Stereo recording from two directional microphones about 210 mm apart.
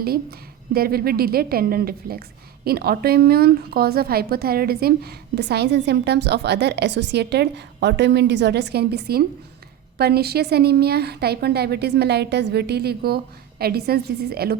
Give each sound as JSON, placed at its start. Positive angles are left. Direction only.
{"t": 0.0, "sound": "a woman's voice", "side_deg": -45}